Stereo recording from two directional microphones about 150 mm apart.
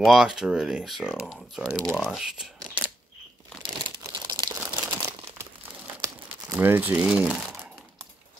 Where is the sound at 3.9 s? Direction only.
25° right (ahead or behind).